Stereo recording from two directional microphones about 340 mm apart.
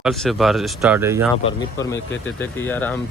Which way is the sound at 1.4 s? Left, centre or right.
Centre.